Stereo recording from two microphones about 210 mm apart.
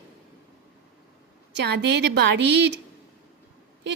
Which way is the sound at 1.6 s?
55° right (ahead or behind).